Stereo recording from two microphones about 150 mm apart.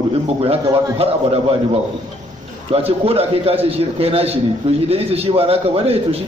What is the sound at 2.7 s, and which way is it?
A man's voice, 40° right (ahead or behind).